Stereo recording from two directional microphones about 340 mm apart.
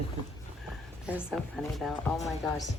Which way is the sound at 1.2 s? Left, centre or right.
Centre.